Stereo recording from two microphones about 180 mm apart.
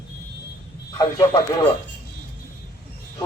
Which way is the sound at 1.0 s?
20° left (ahead or behind).